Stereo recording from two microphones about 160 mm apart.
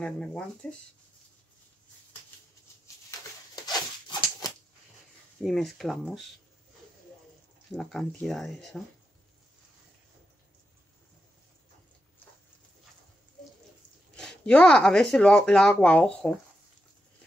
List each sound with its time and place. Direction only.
0.0 s speech: 5° left (ahead or behind)
4.4 s a sound: 25° left (ahead or behind)
5.4 s speech: centre (ahead or behind)
7.7 s speech: 5° left (ahead or behind)
14.1 s speech: 5° left (ahead or behind)